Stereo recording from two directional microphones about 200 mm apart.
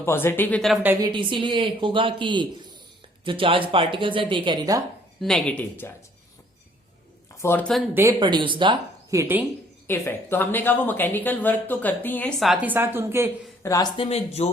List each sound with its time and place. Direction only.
0.0 s speech: 10° left (ahead or behind); by 1.0 s 10° right (ahead or behind)
1.0 s a man's voice: 25° right (ahead or behind)
5.2 s speech: centre (ahead or behind)
7.4 s speech: 5° left (ahead or behind)
7.9 s a man's voice: 20° right (ahead or behind)
9.8 s speech: 10° left (ahead or behind); by 13.3 s 10° right (ahead or behind)
13.6 s speech: 15° left (ahead or behind)